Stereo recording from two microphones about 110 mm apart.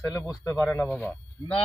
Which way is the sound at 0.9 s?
15° left (ahead or behind).